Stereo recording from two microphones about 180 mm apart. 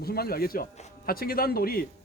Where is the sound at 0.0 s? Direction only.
60° left (ahead or behind).